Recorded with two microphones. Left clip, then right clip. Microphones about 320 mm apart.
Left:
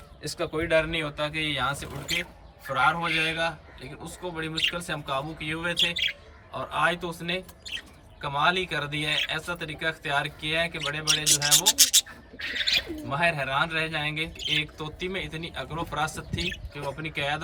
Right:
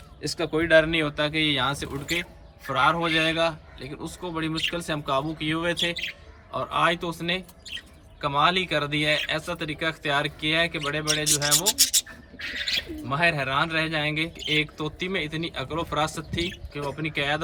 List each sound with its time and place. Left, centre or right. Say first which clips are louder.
0.2 s a man's voice: right 4 dB; centre
11.3 s rub: left 3 dB; centre
13.1 s a man's voice: right 4 dB; centre